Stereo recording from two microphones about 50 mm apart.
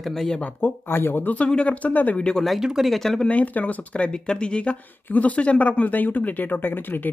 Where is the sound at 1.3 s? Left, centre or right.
Left.